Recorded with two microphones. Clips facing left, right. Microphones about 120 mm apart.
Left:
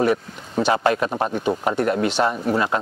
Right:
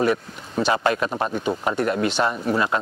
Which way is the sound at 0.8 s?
25° left (ahead or behind).